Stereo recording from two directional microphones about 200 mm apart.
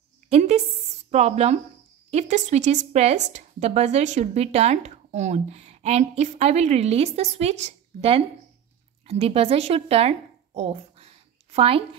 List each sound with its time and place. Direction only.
0.3 s a woman's voice: 35° right (ahead or behind)